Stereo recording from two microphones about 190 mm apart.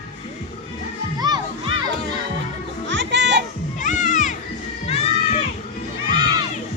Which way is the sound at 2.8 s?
70° right (ahead or behind).